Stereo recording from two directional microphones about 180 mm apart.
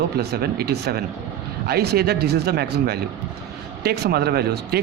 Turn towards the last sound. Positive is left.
turn(degrees=-60)  # may be behind; listen again after turning